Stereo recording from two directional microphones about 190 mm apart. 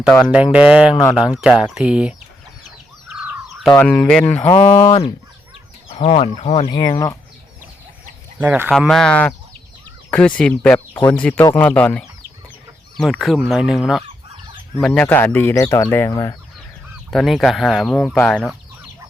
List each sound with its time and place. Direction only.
0.0 s speech: centre (ahead or behind)
3.5 s a sound: centre (ahead or behind)
3.8 s speech: 5° left (ahead or behind)
4.6 s speech: 30° left (ahead or behind)
6.7 s speech: 20° left (ahead or behind)
8.4 s speech: 10° right (ahead or behind)
8.7 s speech: centre (ahead or behind); by 16.3 s 20° left (ahead or behind)
17.1 s speech: centre (ahead or behind)